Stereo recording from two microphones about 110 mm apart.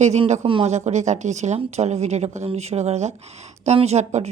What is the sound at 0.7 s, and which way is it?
A woman's voice, 90° right.